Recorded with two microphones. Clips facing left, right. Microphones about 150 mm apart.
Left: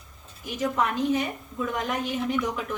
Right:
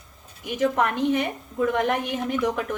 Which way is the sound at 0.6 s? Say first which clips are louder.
Right 3 dB; 60° right (ahead or behind).